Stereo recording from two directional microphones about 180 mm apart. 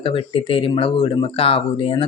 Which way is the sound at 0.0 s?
30° left (ahead or behind).